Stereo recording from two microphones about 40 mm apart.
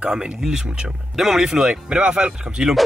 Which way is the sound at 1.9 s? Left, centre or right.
Right.